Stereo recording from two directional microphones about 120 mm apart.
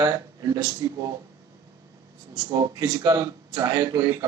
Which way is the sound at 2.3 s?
35° right (ahead or behind).